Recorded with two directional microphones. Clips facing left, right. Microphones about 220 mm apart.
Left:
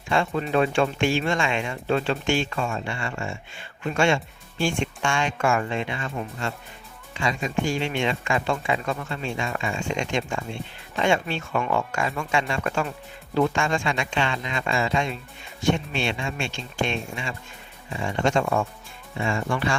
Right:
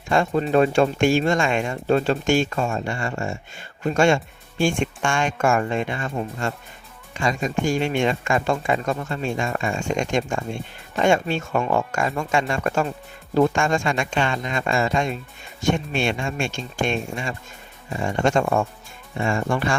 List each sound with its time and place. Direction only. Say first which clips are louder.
0.1 s speech: right 4 dB; 40° right (ahead or behind)